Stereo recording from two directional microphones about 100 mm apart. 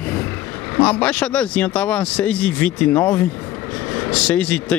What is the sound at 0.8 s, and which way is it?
Speech, 10° left (ahead or behind).